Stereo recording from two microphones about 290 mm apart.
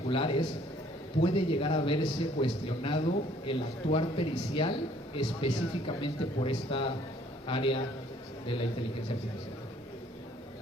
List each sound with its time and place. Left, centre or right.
0.1 s a man's voice: centre